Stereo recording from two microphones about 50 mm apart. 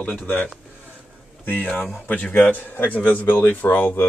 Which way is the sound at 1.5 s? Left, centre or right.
Left.